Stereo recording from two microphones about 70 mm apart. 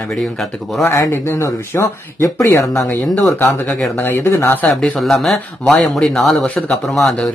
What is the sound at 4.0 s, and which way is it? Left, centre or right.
Speech, left.